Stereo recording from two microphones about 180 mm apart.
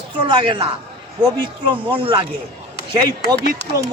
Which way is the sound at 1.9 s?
30° right (ahead or behind).